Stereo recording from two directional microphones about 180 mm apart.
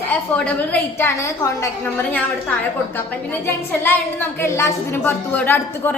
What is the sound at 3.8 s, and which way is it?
A woman's voice, 10° left (ahead or behind).